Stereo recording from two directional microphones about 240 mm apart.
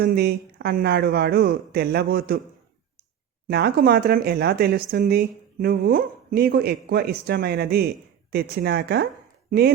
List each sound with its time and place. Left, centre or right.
0.0 s speech: right
3.4 s speech: right